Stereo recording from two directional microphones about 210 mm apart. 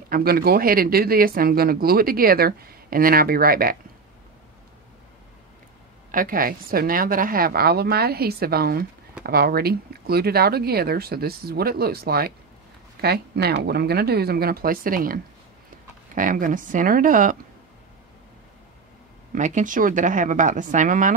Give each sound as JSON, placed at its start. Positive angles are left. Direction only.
{"t": 0.1, "sound": "speech", "side_deg": -45}
{"t": 6.1, "sound": "speech", "side_deg": -40}
{"t": 16.2, "sound": "a woman's voice", "side_deg": -40}
{"t": 19.3, "sound": "a woman's voice", "side_deg": -35}